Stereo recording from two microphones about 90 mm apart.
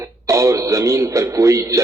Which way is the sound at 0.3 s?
35° right (ahead or behind).